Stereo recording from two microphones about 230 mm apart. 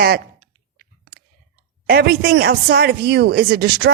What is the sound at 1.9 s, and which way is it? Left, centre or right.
A woman's voice, right.